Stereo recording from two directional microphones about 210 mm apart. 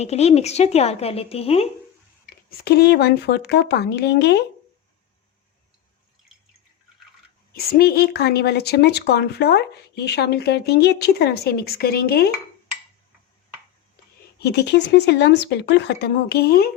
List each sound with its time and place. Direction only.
0.0 s a woman's voice: 30° left (ahead or behind)
2.3 s a woman's voice: 45° left (ahead or behind)
7.5 s a woman's voice: 45° left (ahead or behind)
14.3 s a woman's voice: 50° left (ahead or behind)